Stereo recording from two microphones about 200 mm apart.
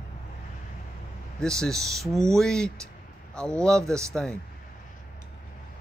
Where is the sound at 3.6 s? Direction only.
15° right (ahead or behind).